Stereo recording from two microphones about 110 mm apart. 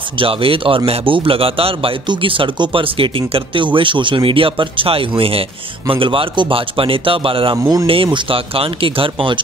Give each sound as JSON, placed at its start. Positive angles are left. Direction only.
{"t": 0.2, "sound": "speech", "side_deg": -55}